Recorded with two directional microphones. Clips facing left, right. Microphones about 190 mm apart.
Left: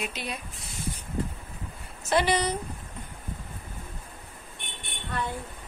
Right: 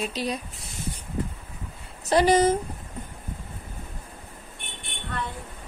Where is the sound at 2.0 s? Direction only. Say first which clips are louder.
Right 6 dB; 40° right (ahead or behind).